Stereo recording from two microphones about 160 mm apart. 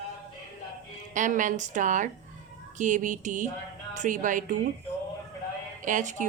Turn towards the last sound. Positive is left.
turn(degrees=-50)  # may be behind; listen again after turning